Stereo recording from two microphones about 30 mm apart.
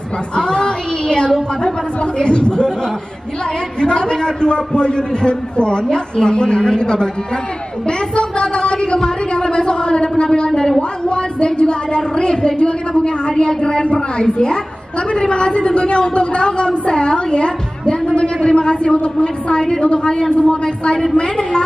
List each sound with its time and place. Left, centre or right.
0.4 s a woman's voice: left
3.8 s a woman's voice: left
7.8 s a sound: left
13.3 s a woman's voice: left
20.9 s a woman's voice: centre
21.2 s a woman's voice: left